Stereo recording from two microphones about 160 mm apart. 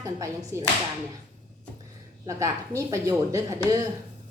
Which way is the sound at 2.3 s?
20° right (ahead or behind).